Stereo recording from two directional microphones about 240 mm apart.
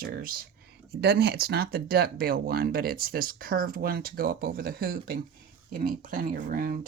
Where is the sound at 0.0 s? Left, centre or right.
Right.